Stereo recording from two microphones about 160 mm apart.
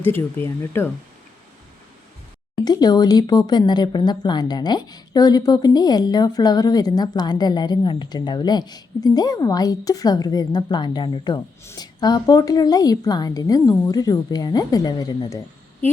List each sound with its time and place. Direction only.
0.0 s speech: 15° left (ahead or behind)
2.6 s speech: 25° left (ahead or behind)